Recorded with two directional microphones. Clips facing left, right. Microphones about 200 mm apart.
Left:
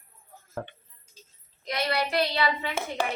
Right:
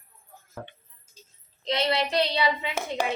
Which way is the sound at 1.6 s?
25° right (ahead or behind).